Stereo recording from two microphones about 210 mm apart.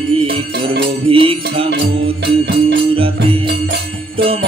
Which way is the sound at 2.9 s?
25° right (ahead or behind).